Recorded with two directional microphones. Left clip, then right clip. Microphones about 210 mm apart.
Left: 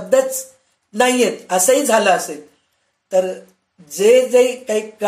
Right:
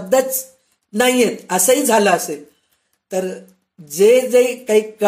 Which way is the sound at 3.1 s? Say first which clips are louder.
Left 5 dB; 45° right (ahead or behind).